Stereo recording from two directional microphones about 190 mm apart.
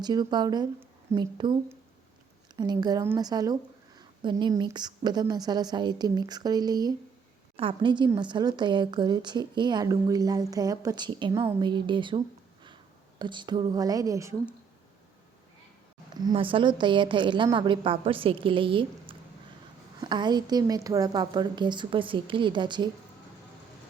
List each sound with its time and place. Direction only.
0.0 s a woman's voice: 20° right (ahead or behind)
2.6 s a woman's voice: 20° right (ahead or behind)
16.2 s a woman's voice: 25° right (ahead or behind)